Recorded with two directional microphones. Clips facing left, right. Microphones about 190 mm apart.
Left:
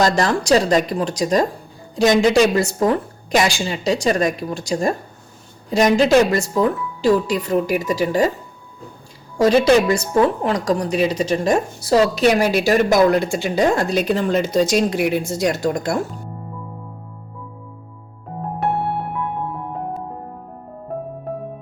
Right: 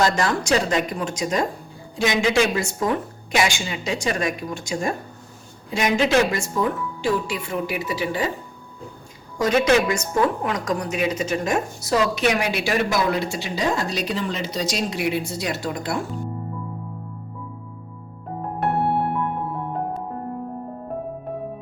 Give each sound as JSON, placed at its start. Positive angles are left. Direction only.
{"t": 0.0, "sound": "speech", "side_deg": 35}
{"t": 9.4, "sound": "a woman's voice", "side_deg": 35}